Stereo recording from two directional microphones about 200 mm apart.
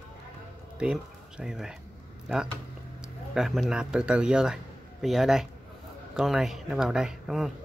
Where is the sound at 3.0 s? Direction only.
Centre (ahead or behind).